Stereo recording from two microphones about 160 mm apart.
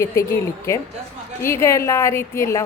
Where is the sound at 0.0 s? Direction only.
15° left (ahead or behind).